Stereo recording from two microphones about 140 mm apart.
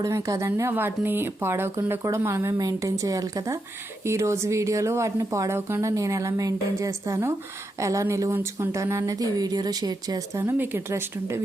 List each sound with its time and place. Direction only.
0.0 s speech: 20° right (ahead or behind)
10.4 s speech: 15° right (ahead or behind)